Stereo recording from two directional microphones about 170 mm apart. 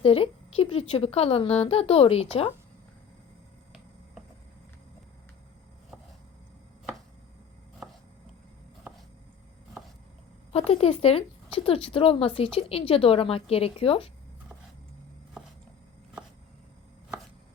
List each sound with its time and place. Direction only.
0.0 s speech: 35° left (ahead or behind)
10.5 s speech: 35° left (ahead or behind)